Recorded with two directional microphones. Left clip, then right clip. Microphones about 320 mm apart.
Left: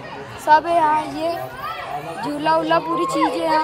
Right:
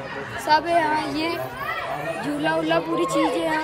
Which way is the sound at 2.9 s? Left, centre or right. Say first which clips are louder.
Left 2 dB; centre.